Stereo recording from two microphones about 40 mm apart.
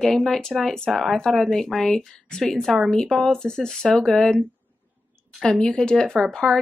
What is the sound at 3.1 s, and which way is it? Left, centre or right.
Speech, centre.